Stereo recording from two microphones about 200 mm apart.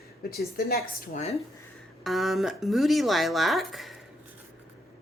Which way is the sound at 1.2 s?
30° left (ahead or behind).